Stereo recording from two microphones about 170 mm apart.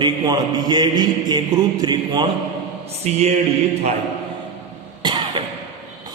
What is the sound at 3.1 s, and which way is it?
Mantra, 40° right (ahead or behind).